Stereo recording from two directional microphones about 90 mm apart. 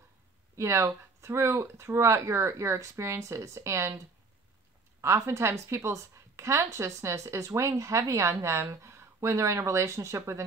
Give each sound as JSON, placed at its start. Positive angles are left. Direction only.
{"t": 0.6, "sound": "a woman's voice", "side_deg": -30}
{"t": 5.0, "sound": "a woman's voice", "side_deg": -35}